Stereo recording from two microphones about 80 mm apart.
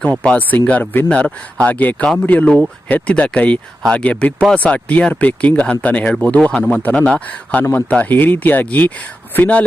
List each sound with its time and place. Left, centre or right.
0.0 s speech: centre